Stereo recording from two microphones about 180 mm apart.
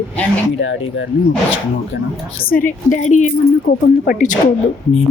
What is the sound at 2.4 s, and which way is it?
A woman's voice, 50° left (ahead or behind).